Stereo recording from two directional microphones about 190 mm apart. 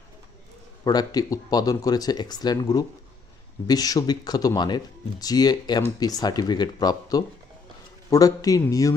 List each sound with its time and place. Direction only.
0.9 s a man's voice: 20° left (ahead or behind)